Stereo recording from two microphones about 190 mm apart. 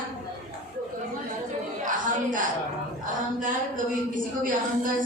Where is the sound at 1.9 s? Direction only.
45° right (ahead or behind).